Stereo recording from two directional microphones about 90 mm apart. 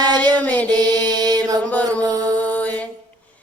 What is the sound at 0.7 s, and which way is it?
Mantra, 50° right (ahead or behind).